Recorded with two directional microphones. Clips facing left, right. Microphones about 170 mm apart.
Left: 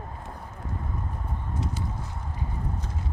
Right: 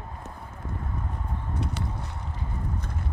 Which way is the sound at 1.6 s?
65° right (ahead or behind).